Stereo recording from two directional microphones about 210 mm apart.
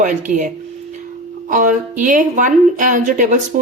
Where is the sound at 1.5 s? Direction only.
40° right (ahead or behind).